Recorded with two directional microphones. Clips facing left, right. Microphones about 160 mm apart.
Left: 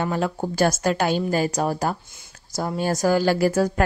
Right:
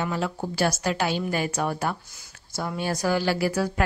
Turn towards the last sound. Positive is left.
turn(degrees=45)  # may be behind; listen again after turning